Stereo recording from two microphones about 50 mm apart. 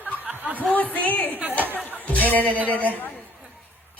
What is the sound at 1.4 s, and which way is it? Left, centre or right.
Chatter, right.